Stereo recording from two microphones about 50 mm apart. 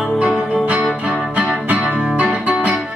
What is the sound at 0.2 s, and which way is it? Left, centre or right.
Music, right.